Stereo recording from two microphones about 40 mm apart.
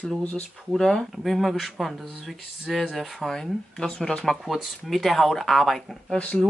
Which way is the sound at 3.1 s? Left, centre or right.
Centre.